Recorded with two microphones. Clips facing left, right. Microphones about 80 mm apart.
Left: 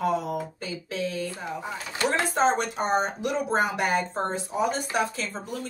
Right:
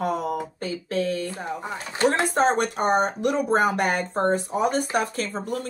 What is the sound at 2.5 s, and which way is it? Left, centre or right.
Speech, right.